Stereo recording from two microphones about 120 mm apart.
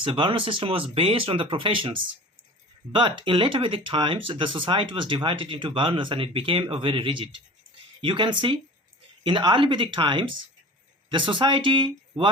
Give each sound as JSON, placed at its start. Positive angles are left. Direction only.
{"t": 0.0, "sound": "speech", "side_deg": -45}